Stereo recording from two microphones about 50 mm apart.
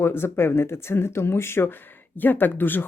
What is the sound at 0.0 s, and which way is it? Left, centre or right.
Speech, left.